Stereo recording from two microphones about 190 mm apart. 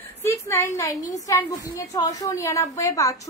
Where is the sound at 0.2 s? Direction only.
15° left (ahead or behind).